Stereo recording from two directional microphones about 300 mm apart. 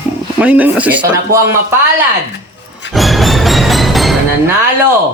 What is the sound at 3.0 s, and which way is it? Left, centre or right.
Music, centre.